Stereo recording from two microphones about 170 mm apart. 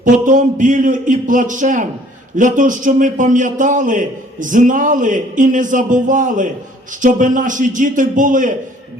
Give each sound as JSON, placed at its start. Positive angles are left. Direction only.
{"t": 0.0, "sound": "a man's voice", "side_deg": -50}